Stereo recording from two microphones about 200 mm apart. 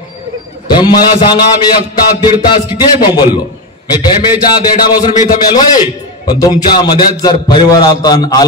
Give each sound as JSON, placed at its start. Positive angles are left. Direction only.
{"t": 0.7, "sound": "a man's voice", "side_deg": 20}
{"t": 5.2, "sound": "a man's voice", "side_deg": 40}
{"t": 6.2, "sound": "a man's voice", "side_deg": 20}